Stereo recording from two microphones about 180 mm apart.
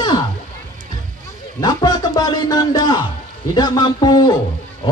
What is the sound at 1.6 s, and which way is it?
Speech, 20° left (ahead or behind).